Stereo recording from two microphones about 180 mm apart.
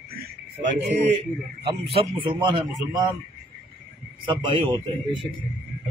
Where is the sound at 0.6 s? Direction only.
35° right (ahead or behind).